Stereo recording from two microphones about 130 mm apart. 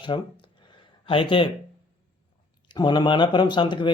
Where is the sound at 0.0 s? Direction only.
40° left (ahead or behind).